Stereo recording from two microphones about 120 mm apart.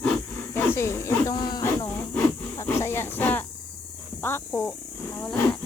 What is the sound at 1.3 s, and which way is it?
Speech, 35° left (ahead or behind).